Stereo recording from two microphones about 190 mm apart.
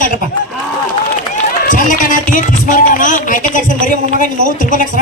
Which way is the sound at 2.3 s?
45° left (ahead or behind).